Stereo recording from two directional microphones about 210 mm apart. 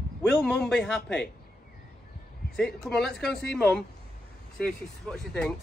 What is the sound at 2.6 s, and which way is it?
Speech, 5° left (ahead or behind).